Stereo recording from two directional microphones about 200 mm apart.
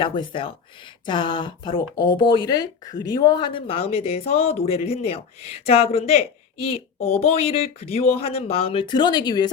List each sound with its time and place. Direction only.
0.2 s speech: 25° left (ahead or behind)